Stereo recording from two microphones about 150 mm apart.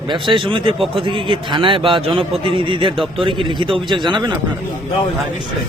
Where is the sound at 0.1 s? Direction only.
35° right (ahead or behind).